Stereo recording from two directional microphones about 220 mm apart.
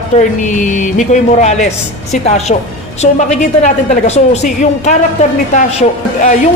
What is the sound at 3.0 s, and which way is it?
A woman's voice, 30° left (ahead or behind).